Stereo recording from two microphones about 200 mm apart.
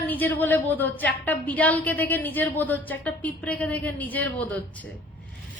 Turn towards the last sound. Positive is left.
turn(degrees=10)  # may be behind; listen again after turning